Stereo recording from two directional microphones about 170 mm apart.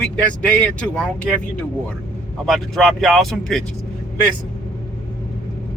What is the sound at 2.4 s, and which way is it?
Speech, centre (ahead or behind).